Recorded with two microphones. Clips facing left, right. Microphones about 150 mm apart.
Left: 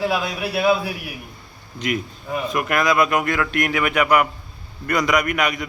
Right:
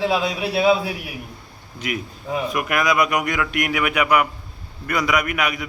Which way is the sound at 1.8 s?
5° right (ahead or behind).